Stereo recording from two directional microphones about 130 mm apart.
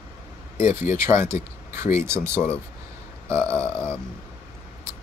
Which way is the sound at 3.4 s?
10° left (ahead or behind).